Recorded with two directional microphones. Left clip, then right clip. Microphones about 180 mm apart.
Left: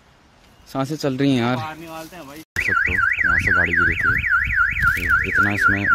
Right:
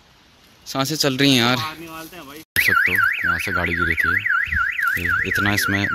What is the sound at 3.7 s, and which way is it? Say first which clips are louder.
Car alarm: left 2 dB; 35° left (ahead or behind).